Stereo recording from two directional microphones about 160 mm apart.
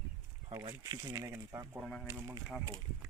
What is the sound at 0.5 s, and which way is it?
Speech, 25° right (ahead or behind).